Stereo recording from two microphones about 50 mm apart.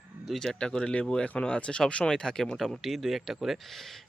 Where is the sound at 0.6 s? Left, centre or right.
Centre.